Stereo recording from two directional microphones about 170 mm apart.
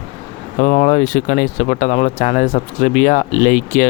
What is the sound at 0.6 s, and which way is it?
Speech, 45° left (ahead or behind).